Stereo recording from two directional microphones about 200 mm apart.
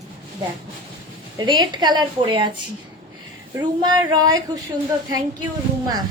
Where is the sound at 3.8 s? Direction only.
20° right (ahead or behind).